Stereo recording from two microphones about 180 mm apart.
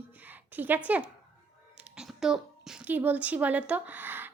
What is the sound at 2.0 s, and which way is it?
Speech, 5° right (ahead or behind).